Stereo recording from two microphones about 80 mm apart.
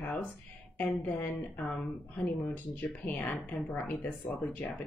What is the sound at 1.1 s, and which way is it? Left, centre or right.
Speech, left.